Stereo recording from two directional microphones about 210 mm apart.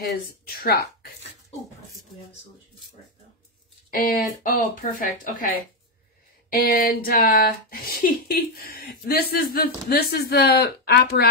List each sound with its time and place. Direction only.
0.2 s speech: 45° left (ahead or behind)
3.9 s speech: 45° left (ahead or behind)